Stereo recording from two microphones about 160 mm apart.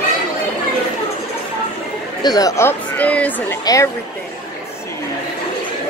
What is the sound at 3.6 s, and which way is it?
Speech, 20° left (ahead or behind).